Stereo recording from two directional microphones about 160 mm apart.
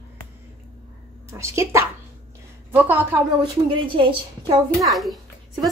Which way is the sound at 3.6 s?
30° right (ahead or behind).